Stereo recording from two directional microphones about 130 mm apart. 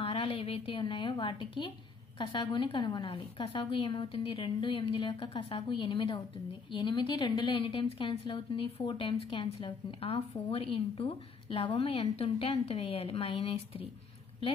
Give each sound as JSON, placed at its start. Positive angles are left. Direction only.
{"t": 0.0, "sound": "a woman's voice", "side_deg": 45}